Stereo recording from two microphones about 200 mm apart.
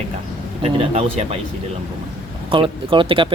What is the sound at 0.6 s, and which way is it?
Speech, 30° right (ahead or behind).